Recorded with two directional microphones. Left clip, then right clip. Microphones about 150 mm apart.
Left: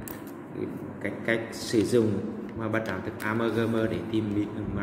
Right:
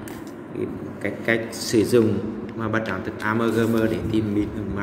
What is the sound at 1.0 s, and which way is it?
A man's voice, 15° right (ahead or behind).